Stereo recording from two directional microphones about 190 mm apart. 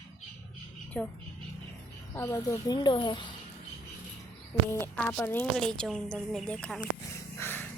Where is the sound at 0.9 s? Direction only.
5° left (ahead or behind).